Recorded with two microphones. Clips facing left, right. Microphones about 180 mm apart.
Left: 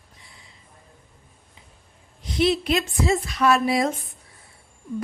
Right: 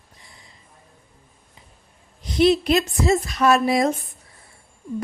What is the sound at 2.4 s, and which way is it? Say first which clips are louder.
A woman's voice: right 4 dB; 40° right (ahead or behind).